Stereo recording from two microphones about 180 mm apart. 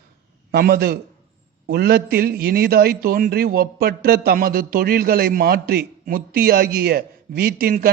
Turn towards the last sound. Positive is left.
turn(degrees=-55)  # may be behind; listen again after turning